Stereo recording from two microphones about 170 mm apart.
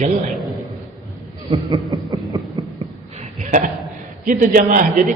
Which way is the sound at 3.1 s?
50° right (ahead or behind).